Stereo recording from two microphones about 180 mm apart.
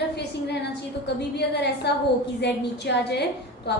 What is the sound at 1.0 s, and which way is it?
A woman's voice, 70° left (ahead or behind).